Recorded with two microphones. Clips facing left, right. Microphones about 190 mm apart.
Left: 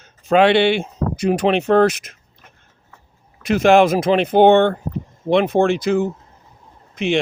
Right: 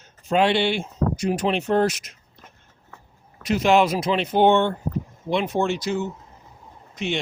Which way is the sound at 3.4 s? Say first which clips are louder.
Left 5 dB; 55° left (ahead or behind).